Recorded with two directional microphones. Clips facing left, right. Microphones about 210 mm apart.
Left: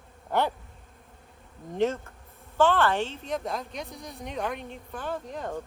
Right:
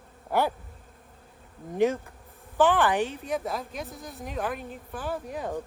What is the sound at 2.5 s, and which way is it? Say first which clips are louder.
A woman's voice: right 1 dB; 15° right (ahead or behind).